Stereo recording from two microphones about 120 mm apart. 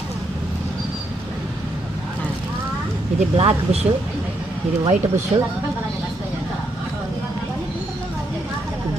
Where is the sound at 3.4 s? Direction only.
60° right (ahead or behind).